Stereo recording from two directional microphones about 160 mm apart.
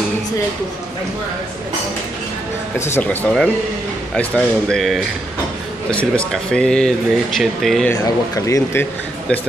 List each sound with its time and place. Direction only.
2.8 s speech: 15° left (ahead or behind)
7.9 s speech: 20° left (ahead or behind)